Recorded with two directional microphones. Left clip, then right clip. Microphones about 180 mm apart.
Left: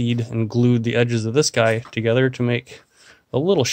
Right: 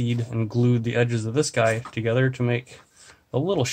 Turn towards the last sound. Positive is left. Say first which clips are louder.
# left 5 dB
turn(degrees=40)  # may be behind; listen again after turning